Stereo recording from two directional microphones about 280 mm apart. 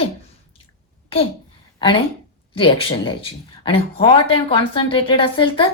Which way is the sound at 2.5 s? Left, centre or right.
Centre.